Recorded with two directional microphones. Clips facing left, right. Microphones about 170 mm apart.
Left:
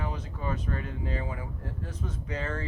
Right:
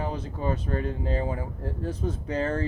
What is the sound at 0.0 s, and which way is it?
Speech, 35° right (ahead or behind).